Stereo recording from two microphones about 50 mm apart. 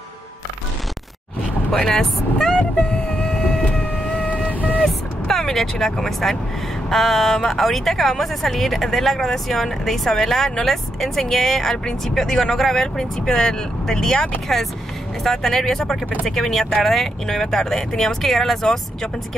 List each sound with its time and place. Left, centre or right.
1.7 s vehicle: centre
4.5 s vehicle: left
4.8 s vehicle: centre
6.9 s speech: centre
11.7 s speech: centre
12.2 s speech: centre
15.2 s speech: centre